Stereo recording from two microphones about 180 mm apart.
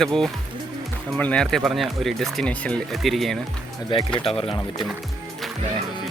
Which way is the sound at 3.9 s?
30° left (ahead or behind).